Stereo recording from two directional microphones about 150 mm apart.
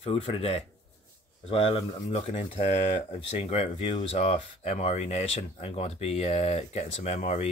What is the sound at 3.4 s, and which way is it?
Speech, 45° left (ahead or behind).